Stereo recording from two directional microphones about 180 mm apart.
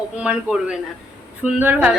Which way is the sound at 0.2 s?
5° right (ahead or behind).